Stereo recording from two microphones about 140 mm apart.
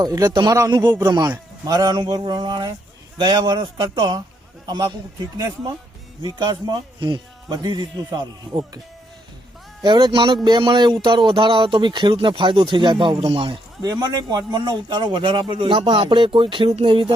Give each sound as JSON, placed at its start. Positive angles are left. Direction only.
{"t": 0.0, "sound": "speech", "side_deg": -25}
{"t": 6.2, "sound": "speech", "side_deg": -30}
{"t": 9.8, "sound": "speech", "side_deg": -30}
{"t": 14.0, "sound": "speech", "side_deg": -30}